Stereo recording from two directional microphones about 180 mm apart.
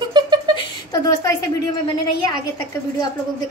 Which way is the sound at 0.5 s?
20° left (ahead or behind).